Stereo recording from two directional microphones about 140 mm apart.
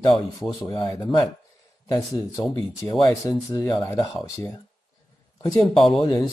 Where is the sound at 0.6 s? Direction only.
30° left (ahead or behind).